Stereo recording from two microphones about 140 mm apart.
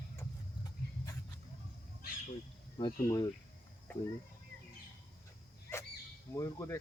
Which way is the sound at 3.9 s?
15° left (ahead or behind).